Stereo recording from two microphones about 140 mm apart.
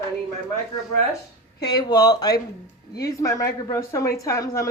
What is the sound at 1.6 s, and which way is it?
Speech, 30° left (ahead or behind).